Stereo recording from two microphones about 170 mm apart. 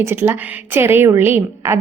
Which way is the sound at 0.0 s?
15° right (ahead or behind).